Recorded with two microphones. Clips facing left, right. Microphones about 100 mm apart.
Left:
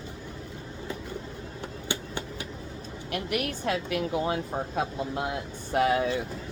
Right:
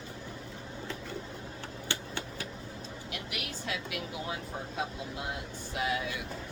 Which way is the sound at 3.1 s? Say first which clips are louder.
Left 12 dB; 50° left (ahead or behind).